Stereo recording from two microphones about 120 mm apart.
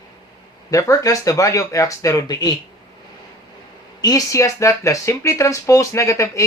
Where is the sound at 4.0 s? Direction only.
30° left (ahead or behind).